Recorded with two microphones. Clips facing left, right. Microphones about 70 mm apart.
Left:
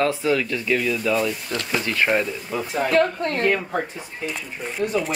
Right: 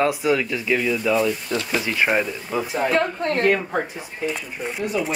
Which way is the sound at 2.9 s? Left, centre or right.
Right.